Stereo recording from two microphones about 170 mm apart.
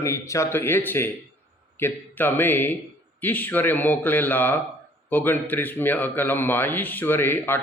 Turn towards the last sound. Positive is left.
turn(degrees=10)  # may be behind; listen again after turning